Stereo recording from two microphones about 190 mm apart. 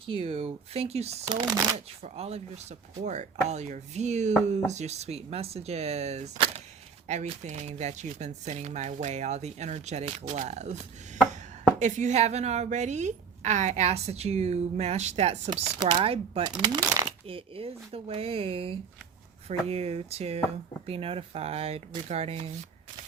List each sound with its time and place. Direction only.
0.1 s a woman's voice: 30° right (ahead or behind)
11.8 s a woman's voice: 40° right (ahead or behind)